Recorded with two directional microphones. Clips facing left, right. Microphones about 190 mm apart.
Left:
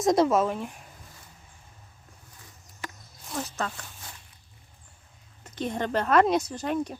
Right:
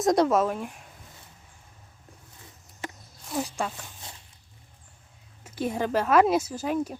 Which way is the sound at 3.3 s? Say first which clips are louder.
Right 2 dB; 10° right (ahead or behind).